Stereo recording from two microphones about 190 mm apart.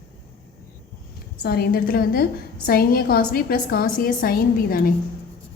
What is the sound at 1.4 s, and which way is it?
A woman's voice, 55° left (ahead or behind).